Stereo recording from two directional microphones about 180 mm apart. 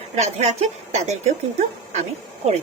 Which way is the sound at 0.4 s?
40° right (ahead or behind).